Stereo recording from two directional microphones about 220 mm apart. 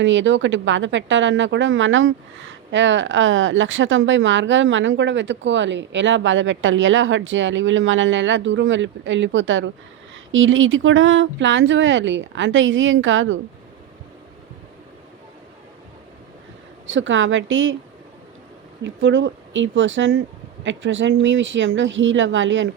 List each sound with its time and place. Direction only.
0.0 s speech: 60° right (ahead or behind)
16.8 s speech: 60° right (ahead or behind)
19.0 s speech: 55° right (ahead or behind)